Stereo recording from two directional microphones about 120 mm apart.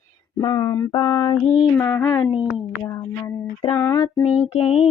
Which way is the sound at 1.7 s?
15° left (ahead or behind).